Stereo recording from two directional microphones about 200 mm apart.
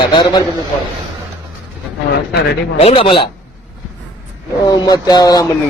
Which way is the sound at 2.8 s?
30° left (ahead or behind).